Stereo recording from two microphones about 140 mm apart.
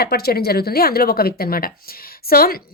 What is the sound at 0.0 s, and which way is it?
A woman's voice, 90° left.